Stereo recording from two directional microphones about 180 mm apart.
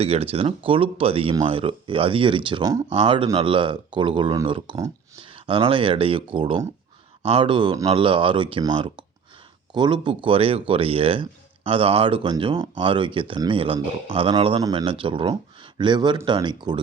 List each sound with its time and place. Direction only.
0.0 s speech: 35° right (ahead or behind)